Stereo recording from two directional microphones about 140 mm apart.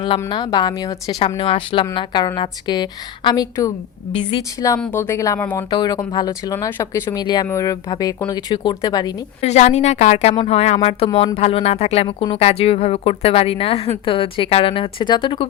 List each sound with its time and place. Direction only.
0.3 s a woman's voice: 35° left (ahead or behind)
1.4 s a woman's voice: 40° left (ahead or behind)
4.1 s a woman's voice: 35° left (ahead or behind)
4.8 s speech: 15° left (ahead or behind)
5.7 s speech: 30° left (ahead or behind)
7.2 s a woman's voice: 30° left (ahead or behind)
9.4 s a woman's voice: 55° left (ahead or behind); by 15.4 s 35° left (ahead or behind)